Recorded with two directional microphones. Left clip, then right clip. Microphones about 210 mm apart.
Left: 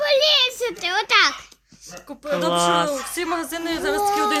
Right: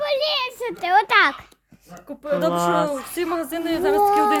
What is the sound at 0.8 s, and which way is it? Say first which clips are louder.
Speech: right 2 dB; 25° right (ahead or behind).